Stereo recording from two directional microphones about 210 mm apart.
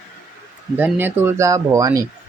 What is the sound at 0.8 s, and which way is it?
Speech, 10° right (ahead or behind).